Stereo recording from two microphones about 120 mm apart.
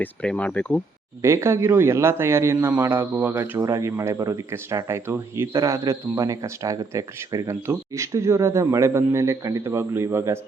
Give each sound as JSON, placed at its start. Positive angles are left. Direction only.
{"t": 0.0, "sound": "speech", "side_deg": 10}
{"t": 1.2, "sound": "speech", "side_deg": -25}